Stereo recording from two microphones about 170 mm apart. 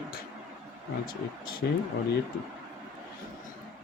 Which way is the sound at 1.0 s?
60° left (ahead or behind).